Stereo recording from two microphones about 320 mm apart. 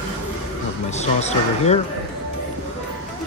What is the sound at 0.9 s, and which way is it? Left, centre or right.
Speech, centre.